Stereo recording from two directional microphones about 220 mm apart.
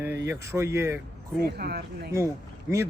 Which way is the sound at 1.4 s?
45° right (ahead or behind).